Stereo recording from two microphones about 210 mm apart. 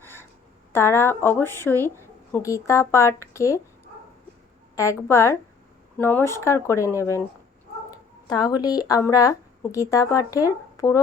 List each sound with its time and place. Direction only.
0.0 s a sound: 10° left (ahead or behind)
0.7 s speech: 10° left (ahead or behind)
4.7 s speech: 15° left (ahead or behind)